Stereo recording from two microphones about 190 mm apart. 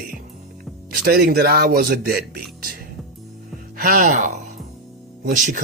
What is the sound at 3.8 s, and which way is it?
Speech, 45° right (ahead or behind).